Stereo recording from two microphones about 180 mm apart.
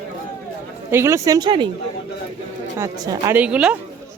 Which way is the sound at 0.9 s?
15° right (ahead or behind).